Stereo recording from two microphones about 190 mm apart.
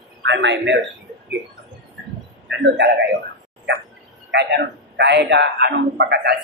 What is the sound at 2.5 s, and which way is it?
Speech, 65° right (ahead or behind).